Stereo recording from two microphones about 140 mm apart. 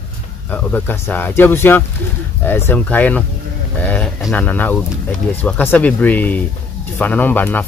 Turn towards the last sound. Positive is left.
turn(degrees=15)  # may be behind; listen again after turning